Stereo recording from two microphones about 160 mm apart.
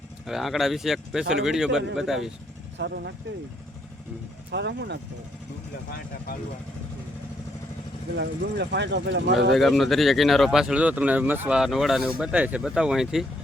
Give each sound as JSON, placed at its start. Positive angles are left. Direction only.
{"t": 0.3, "sound": "speech", "side_deg": 0}
{"t": 2.7, "sound": "speech", "side_deg": -90}
{"t": 4.5, "sound": "speech", "side_deg": -90}
{"t": 8.1, "sound": "speech", "side_deg": -90}
{"t": 9.6, "sound": "speech", "side_deg": 0}